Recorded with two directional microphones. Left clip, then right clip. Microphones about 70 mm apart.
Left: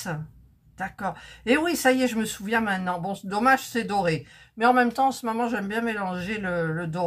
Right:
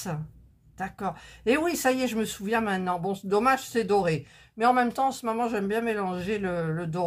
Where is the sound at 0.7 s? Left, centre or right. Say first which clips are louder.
Left 2 dB; right.